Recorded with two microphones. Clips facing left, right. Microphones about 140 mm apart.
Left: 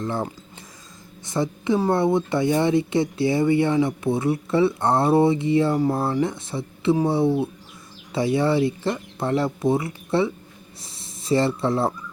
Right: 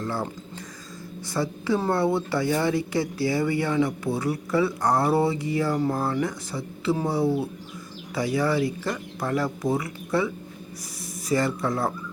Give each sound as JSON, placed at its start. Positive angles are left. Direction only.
{"t": 0.0, "sound": "speech", "side_deg": 20}
{"t": 1.3, "sound": "speech", "side_deg": 20}